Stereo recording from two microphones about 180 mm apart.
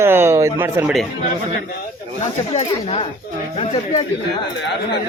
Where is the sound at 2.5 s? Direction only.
35° left (ahead or behind).